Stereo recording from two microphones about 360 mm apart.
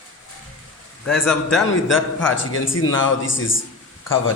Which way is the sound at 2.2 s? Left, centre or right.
Left.